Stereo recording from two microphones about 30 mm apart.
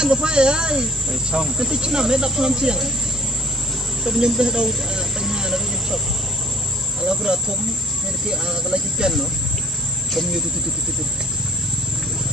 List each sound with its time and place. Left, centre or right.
0.0 s speech: right
4.1 s speech: right
5.2 s vehicle: centre
7.0 s cricket: right
8.3 s speech: right